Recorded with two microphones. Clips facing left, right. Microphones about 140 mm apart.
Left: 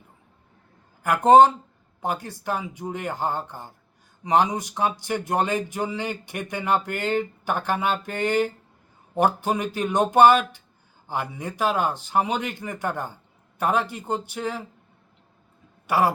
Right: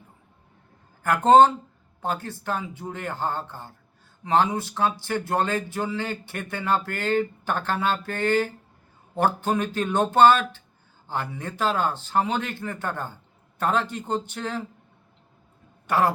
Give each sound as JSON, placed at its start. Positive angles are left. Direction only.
{"t": 1.0, "sound": "speech", "side_deg": 10}
{"t": 15.9, "sound": "speech", "side_deg": 10}